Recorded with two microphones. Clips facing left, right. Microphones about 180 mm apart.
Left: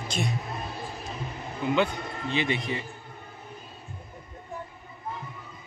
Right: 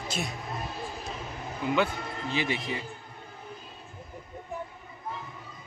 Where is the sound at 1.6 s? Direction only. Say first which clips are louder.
Left 2 dB; 5° right (ahead or behind).